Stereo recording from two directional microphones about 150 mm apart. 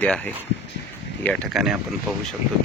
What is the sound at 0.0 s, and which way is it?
Speech, 5° left (ahead or behind).